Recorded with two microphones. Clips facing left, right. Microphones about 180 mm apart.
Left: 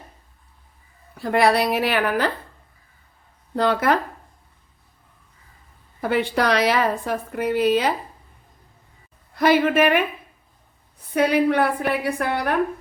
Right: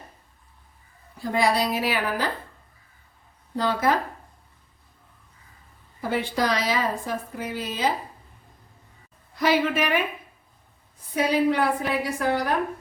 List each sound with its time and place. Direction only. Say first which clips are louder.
1.2 s a woman's voice: left 4 dB; 65° left (ahead or behind)
3.5 s a woman's voice: left 4 dB; 65° left (ahead or behind)
6.0 s a woman's voice: left 4 dB; 65° left (ahead or behind)
9.3 s a woman's voice: left 5 dB; 55° left (ahead or behind)
11.1 s a woman's voice: left 3 dB; 60° left (ahead or behind)